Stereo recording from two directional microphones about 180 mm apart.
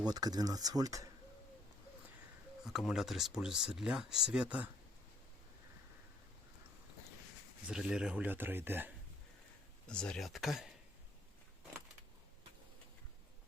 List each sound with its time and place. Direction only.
0.0 s speech: 20° right (ahead or behind)
2.6 s speech: centre (ahead or behind)
7.7 s speech: 5° right (ahead or behind)
9.8 s speech: 5° left (ahead or behind)